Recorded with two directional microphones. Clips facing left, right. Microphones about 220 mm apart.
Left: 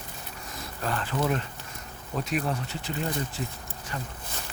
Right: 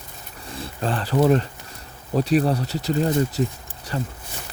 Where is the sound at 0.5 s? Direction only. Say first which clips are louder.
Right 6 dB; 30° right (ahead or behind).